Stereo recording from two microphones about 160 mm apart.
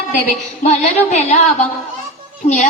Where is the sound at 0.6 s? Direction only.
45° left (ahead or behind).